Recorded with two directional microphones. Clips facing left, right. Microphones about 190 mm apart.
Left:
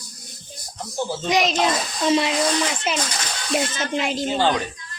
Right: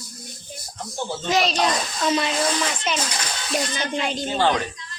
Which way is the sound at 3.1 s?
Centre (ahead or behind).